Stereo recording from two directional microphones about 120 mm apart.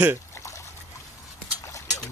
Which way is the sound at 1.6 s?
25° left (ahead or behind).